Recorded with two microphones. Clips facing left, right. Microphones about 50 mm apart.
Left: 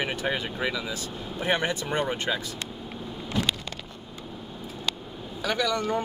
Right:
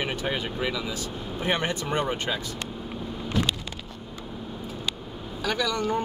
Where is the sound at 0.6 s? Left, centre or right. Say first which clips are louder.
Even; centre.